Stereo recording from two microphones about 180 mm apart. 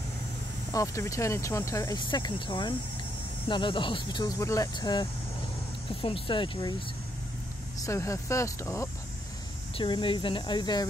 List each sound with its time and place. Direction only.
0.7 s speech: 20° left (ahead or behind)
7.8 s speech: 15° left (ahead or behind)
9.8 s speech: 25° left (ahead or behind)